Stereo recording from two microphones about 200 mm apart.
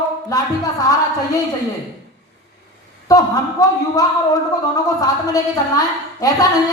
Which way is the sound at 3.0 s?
20° left (ahead or behind).